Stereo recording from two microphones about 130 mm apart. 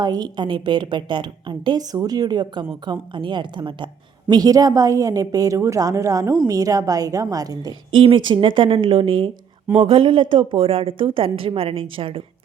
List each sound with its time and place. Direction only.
0.0 s a woman's voice: 30° right (ahead or behind)
7.9 s a woman's voice: 40° right (ahead or behind)